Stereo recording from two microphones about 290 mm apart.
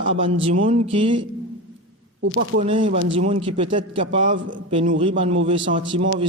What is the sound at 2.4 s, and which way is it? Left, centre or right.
A man's voice, right.